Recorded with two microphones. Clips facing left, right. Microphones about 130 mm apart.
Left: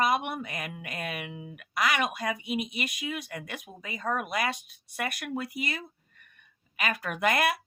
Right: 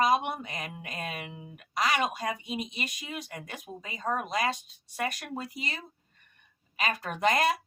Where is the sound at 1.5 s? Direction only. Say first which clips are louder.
Even; 30° right (ahead or behind).